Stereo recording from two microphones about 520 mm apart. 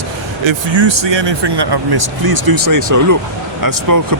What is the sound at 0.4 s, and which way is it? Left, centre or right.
Speech, right.